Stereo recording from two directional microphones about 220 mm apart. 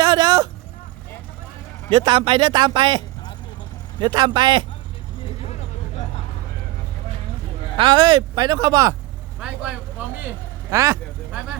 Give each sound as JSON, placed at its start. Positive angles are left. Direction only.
{"t": 0.0, "sound": "a sound", "side_deg": -20}
{"t": 1.9, "sound": "speech", "side_deg": -20}
{"t": 4.0, "sound": "speech", "side_deg": -20}
{"t": 7.8, "sound": "speech", "side_deg": -20}
{"t": 10.0, "sound": "speech", "side_deg": -10}